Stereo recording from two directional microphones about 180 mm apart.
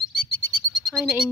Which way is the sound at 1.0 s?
5° right (ahead or behind).